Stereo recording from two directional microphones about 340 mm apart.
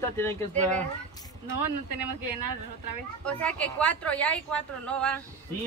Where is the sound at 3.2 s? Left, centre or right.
Centre.